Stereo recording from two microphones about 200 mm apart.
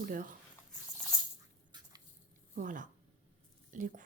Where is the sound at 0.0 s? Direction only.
45° right (ahead or behind).